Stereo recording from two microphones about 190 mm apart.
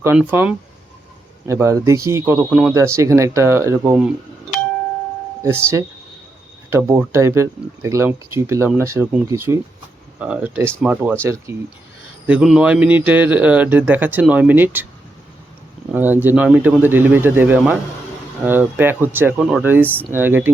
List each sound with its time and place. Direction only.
0.0 s speech: 10° right (ahead or behind)
5.4 s speech: 15° right (ahead or behind)
12.3 s speech: 5° right (ahead or behind)
15.9 s speech: 10° right (ahead or behind)